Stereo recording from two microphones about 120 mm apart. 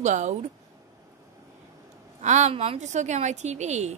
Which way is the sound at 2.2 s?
80° right.